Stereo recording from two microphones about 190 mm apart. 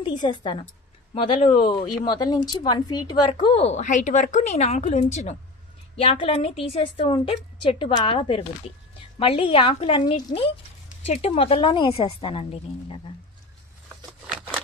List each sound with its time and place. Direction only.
0.0 s speech: 25° left (ahead or behind)